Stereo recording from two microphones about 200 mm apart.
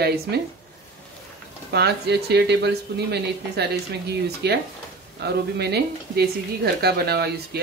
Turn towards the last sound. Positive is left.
turn(degrees=-55)  # may be behind; listen again after turning